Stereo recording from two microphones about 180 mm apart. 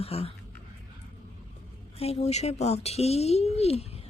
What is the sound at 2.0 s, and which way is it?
A woman's voice, 35° left (ahead or behind).